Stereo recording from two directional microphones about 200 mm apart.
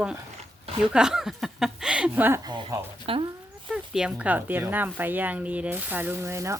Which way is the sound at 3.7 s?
5° right (ahead or behind).